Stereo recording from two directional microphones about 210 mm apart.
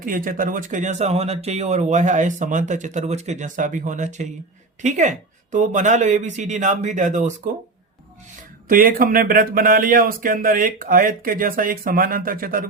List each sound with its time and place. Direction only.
0.0 s speech: 40° right (ahead or behind)
8.7 s speech: 40° right (ahead or behind)